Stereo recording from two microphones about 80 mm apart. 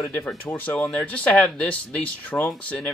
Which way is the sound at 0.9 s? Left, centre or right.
Centre.